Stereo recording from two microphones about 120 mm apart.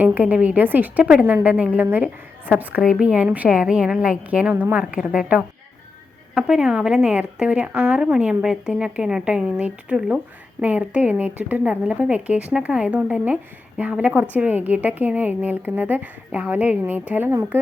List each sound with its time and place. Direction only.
0.0 s speech: 15° right (ahead or behind)
1.0 s a woman's voice: 5° right (ahead or behind)
1.3 s speech: 15° right (ahead or behind)